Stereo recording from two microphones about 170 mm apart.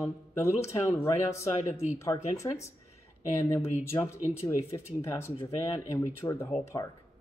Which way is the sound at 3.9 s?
20° left (ahead or behind).